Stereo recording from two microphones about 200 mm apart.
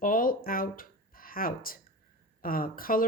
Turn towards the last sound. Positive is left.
turn(degrees=45)  # may be behind; listen again after turning